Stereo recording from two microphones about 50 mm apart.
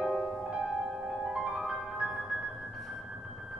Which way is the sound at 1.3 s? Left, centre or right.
Centre.